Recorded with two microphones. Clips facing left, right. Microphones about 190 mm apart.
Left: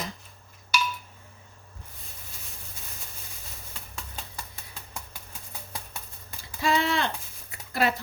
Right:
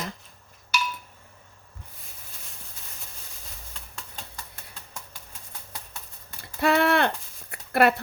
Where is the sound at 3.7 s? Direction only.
5° left (ahead or behind).